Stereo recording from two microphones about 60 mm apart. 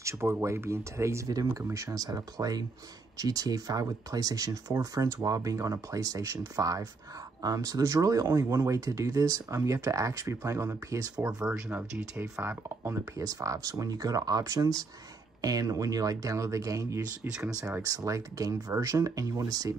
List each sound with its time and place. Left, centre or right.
0.0 s speech: right
10.9 s speech: right
12.4 s speech: right
13.2 s speech: right